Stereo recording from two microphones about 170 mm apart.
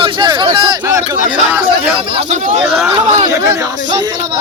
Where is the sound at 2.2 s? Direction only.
40° right (ahead or behind).